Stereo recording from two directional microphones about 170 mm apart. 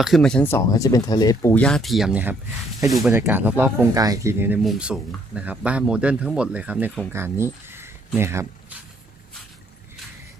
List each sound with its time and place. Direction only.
0.0 s speech: centre (ahead or behind); by 8.4 s 15° right (ahead or behind)